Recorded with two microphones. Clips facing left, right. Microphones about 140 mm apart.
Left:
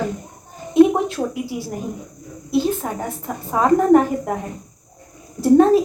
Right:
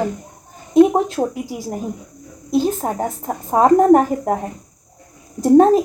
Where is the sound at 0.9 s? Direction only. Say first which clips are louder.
Right 3 dB; 40° right (ahead or behind).